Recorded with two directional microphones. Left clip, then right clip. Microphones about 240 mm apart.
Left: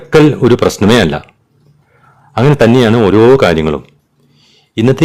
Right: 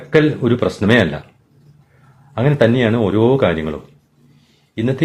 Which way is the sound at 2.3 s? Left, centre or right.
Left.